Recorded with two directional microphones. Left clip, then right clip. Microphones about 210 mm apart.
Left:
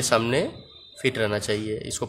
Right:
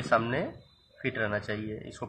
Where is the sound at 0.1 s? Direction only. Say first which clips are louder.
Left 4 dB; 60° left (ahead or behind).